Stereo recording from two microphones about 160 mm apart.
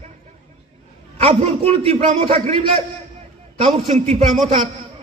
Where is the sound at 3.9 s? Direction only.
50° right (ahead or behind).